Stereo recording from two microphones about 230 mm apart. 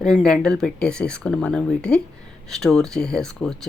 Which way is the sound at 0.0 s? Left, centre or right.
Centre.